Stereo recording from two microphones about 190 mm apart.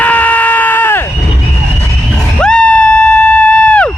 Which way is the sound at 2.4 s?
5° left (ahead or behind).